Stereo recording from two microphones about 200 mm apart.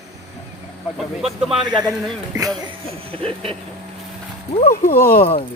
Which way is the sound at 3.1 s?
25° right (ahead or behind).